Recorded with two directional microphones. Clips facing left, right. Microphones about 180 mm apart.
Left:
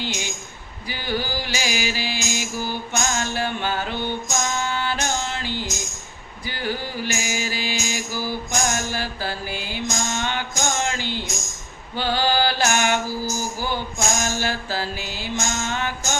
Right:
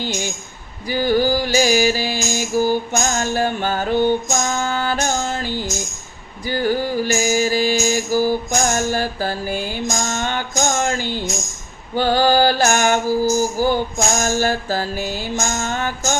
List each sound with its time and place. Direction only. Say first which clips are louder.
0.0 s a woman's voice: right 5 dB; 45° right (ahead or behind)
0.9 s music: right 10 dB; 45° right (ahead or behind)
11.9 s a sound: right 6 dB; 45° right (ahead or behind)
13.6 s music: right 8 dB; 45° right (ahead or behind)